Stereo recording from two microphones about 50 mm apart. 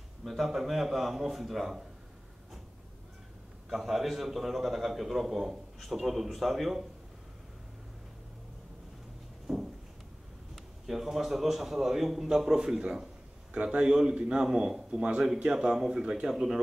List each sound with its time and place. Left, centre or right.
0.2 s a man's voice: centre
3.7 s a man's voice: centre
9.5 s a sound: centre
10.5 s a man's voice: centre